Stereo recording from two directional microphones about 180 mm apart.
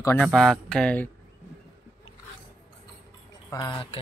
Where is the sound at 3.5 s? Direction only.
25° left (ahead or behind).